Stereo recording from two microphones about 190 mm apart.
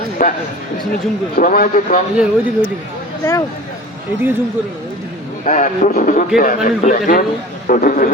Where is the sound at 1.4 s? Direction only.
45° left (ahead or behind).